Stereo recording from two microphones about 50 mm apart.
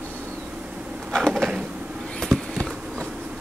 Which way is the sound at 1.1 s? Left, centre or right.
Centre.